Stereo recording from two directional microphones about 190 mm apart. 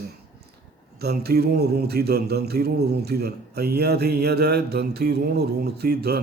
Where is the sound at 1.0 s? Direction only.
55° right (ahead or behind).